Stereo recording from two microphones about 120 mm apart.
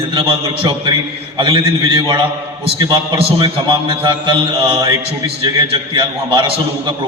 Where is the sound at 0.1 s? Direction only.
45° right (ahead or behind).